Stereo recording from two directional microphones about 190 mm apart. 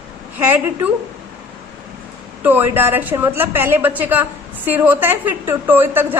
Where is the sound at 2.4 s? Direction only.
10° right (ahead or behind).